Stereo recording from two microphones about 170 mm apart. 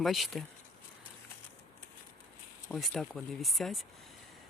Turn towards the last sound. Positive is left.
turn(degrees=0)  # may be behind; listen again after turning